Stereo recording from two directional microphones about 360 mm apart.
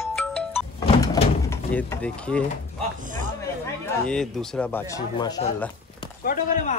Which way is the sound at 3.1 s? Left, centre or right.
Right.